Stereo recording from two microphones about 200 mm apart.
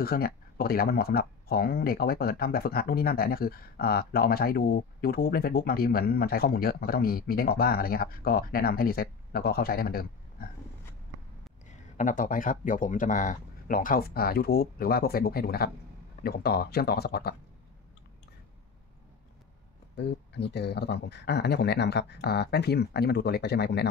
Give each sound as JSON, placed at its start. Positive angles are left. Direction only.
{"t": 0.0, "sound": "speech", "side_deg": 50}
{"t": 12.0, "sound": "speech", "side_deg": 40}
{"t": 20.0, "sound": "speech", "side_deg": 55}